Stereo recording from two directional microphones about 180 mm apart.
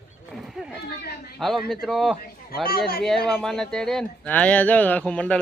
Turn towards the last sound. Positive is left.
turn(degrees=5)  # may be behind; listen again after turning